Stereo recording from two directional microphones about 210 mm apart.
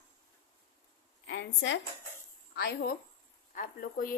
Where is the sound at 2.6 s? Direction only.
50° left (ahead or behind).